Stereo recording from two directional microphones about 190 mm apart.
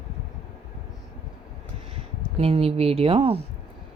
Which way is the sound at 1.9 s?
30° right (ahead or behind).